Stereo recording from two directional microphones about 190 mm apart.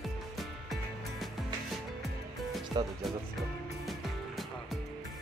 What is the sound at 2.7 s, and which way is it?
Speech, 25° right (ahead or behind).